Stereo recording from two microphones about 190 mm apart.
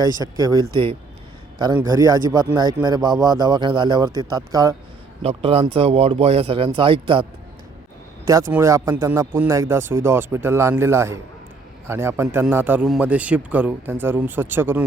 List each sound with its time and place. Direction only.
0.0 s speech: 20° right (ahead or behind)
1.8 s speech: 20° right (ahead or behind)
5.2 s speech: 30° right (ahead or behind)
8.2 s speech: 15° right (ahead or behind)